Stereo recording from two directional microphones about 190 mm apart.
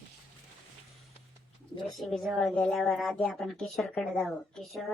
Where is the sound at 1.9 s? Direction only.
Centre (ahead or behind).